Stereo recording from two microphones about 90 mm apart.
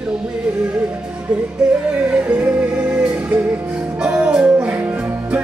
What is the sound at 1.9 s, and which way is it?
Music, 15° right (ahead or behind).